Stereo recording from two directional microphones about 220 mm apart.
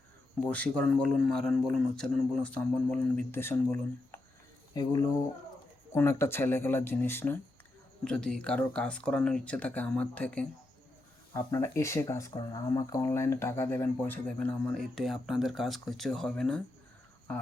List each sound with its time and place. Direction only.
0.3 s speech: 5° left (ahead or behind)